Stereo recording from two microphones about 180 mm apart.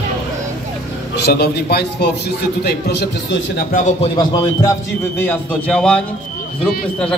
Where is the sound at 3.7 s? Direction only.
40° left (ahead or behind).